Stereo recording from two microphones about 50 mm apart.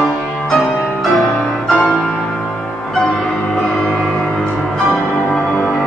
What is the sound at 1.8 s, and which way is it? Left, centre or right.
Music, left.